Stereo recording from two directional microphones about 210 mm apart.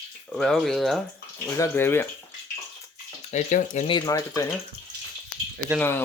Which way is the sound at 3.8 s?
20° left (ahead or behind).